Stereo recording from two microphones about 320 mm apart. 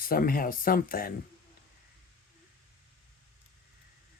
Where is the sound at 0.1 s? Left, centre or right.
Left.